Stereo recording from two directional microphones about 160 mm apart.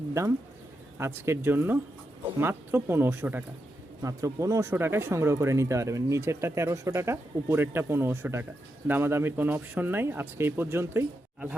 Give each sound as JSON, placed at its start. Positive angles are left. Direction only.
{"t": 0.1, "sound": "speech", "side_deg": -20}